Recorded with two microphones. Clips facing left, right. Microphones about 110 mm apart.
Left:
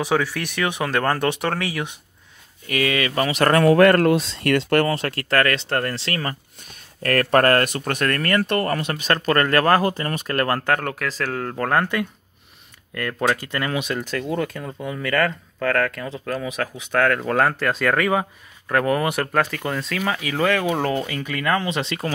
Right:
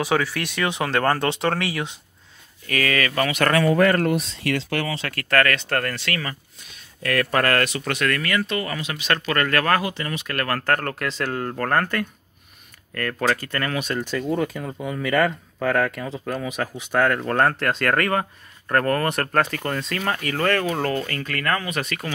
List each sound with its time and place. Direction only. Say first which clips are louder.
0.1 s speech: left 1 dB; 15° left (ahead or behind)
1.5 s speech: right 1 dB; 15° right (ahead or behind)
2.6 s speech: left 1 dB; 20° left (ahead or behind)
3.6 s speech: left 7 dB; 70° left (ahead or behind); by 5.0 s 50° left (ahead or behind)
5.0 s speech: left 1 dB; 25° left (ahead or behind); by 8.5 s 45° left (ahead or behind)
8.5 s speech: left 5 dB; 55° left (ahead or behind)
9.1 s speech: left 3 dB; 35° left (ahead or behind)
9.8 s speech: left 4 dB; 40° left (ahead or behind)
10.6 s speech: left 1 dB; 10° left (ahead or behind)
13.9 s speech: right 1 dB; centre (ahead or behind)
21.5 s speech: left 3 dB; 25° left (ahead or behind)